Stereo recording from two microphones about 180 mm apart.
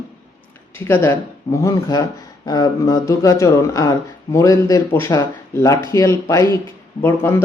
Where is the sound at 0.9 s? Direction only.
15° left (ahead or behind).